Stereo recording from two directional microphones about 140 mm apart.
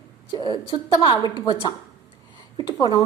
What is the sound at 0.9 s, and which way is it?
Speech, 30° left (ahead or behind).